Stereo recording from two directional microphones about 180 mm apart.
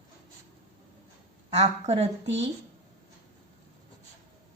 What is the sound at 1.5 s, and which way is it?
Speech, 35° right (ahead or behind).